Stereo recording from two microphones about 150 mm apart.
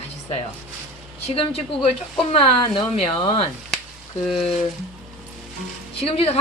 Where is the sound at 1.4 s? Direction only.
40° left (ahead or behind).